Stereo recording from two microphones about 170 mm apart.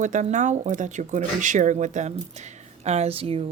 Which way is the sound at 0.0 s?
45° right (ahead or behind).